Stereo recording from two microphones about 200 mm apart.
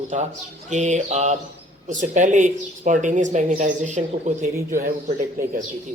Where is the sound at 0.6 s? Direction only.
35° right (ahead or behind).